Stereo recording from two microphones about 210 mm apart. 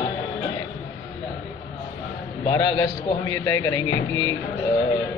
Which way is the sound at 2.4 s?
20° left (ahead or behind).